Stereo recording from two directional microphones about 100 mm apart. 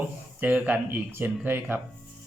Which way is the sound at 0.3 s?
15° right (ahead or behind).